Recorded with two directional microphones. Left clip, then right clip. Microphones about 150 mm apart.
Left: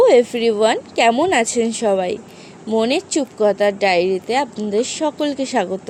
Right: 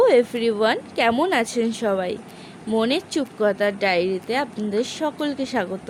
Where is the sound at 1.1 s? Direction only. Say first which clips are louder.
Left 5 dB; centre (ahead or behind).